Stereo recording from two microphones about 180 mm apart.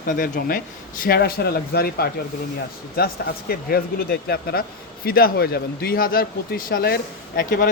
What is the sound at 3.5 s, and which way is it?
Speech, 60° left (ahead or behind).